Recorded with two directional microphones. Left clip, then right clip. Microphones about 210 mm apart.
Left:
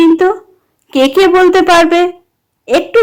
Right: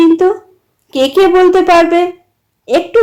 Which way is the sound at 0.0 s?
15° left (ahead or behind).